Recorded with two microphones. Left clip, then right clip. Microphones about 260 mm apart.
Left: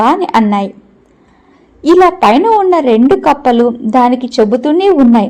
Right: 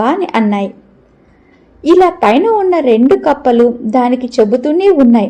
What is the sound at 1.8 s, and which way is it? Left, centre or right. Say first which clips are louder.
A woman's voice: left 2 dB; left.